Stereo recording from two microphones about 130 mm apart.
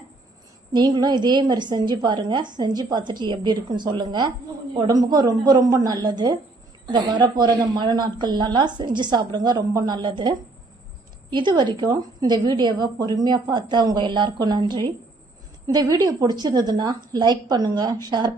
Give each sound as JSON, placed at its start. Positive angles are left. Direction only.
{"t": 0.7, "sound": "a woman's voice", "side_deg": -35}